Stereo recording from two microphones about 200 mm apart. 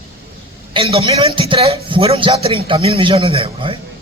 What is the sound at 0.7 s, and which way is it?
A man's voice, 25° right (ahead or behind).